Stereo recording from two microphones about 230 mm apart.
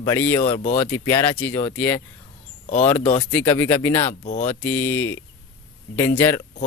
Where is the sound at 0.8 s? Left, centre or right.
Centre.